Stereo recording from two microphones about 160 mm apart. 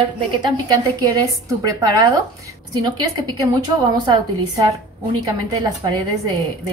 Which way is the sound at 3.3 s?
25° right (ahead or behind).